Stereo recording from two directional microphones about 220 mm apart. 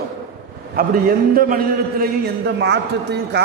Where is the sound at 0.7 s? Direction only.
40° right (ahead or behind).